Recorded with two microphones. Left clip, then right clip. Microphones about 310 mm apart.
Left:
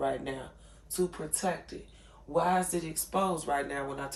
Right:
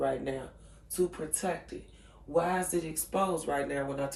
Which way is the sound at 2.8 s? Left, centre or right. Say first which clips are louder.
Even; centre.